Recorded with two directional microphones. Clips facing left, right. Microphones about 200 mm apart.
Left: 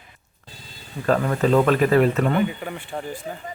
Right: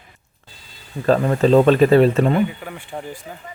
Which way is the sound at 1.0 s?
30° right (ahead or behind).